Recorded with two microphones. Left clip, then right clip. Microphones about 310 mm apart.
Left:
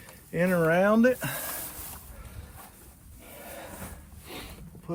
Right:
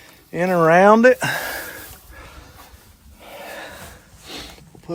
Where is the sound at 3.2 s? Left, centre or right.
Centre.